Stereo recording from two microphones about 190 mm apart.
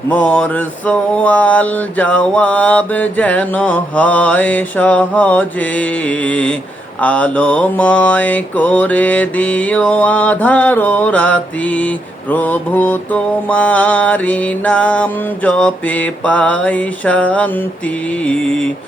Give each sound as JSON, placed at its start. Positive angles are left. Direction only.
{"t": 0.1, "sound": "mantra", "side_deg": 5}